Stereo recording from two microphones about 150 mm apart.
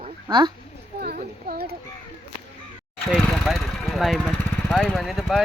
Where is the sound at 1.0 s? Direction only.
90° right.